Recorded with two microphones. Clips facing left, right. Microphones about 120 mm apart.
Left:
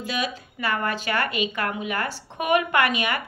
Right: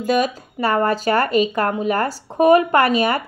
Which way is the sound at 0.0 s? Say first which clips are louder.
Right 10 dB; 45° right (ahead or behind).